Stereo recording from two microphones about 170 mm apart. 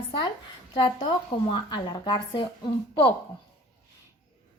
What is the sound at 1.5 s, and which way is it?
Speech, 25° left (ahead or behind).